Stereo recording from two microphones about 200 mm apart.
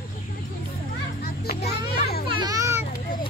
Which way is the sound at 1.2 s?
55° left (ahead or behind).